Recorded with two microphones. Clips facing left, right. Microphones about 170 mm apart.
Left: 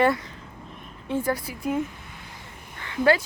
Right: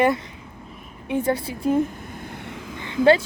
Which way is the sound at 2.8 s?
25° right (ahead or behind).